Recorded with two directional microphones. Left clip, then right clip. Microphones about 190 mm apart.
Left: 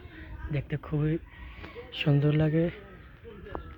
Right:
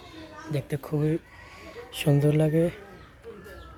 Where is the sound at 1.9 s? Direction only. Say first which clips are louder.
Right 4 dB; 20° right (ahead or behind).